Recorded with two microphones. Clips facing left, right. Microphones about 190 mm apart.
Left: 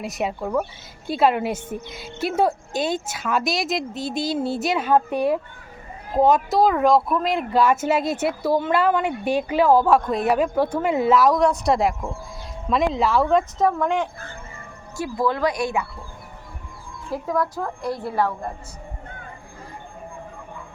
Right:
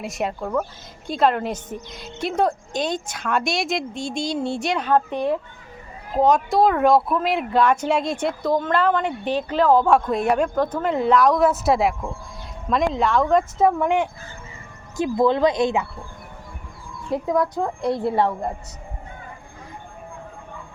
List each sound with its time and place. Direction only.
0.0 s speech: centre (ahead or behind)
13.6 s a woman's voice: 10° right (ahead or behind)
17.1 s a woman's voice: 20° right (ahead or behind)